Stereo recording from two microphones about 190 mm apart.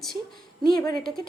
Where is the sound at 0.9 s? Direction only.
50° right (ahead or behind).